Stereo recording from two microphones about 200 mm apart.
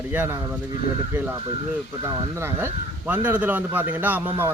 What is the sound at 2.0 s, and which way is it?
Speech, 15° right (ahead or behind).